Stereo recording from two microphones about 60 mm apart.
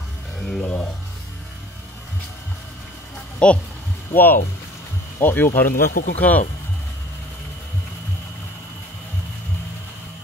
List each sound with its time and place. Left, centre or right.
0.4 s music: centre
3.4 s speech: centre
4.1 s speech: left